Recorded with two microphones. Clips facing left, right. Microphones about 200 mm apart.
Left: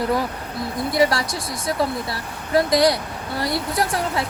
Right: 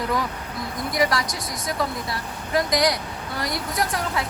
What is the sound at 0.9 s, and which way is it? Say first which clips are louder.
Speech: left 4 dB; 30° left (ahead or behind).